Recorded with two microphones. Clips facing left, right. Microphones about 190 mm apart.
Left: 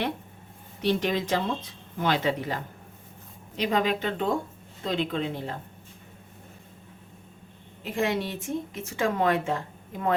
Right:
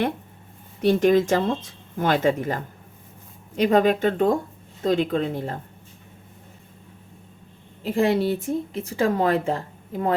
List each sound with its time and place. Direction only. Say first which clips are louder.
0.8 s speech: right 8 dB; 50° right (ahead or behind)
3.6 s speech: right 7 dB; 50° right (ahead or behind)
7.9 s speech: right 7 dB; 35° right (ahead or behind)